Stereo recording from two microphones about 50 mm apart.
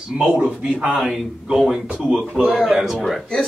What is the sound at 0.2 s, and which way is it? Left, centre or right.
Speech, right.